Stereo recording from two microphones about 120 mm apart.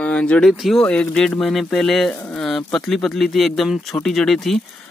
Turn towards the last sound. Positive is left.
turn(degrees=0)  # may be behind; listen again after turning